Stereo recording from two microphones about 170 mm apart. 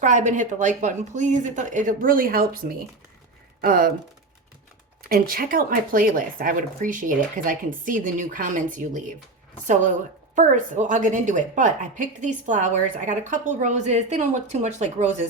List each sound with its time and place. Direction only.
0.0 s a woman's voice: 45° right (ahead or behind)
5.0 s a woman's voice: 60° right (ahead or behind)
10.3 s a woman's voice: 50° right (ahead or behind)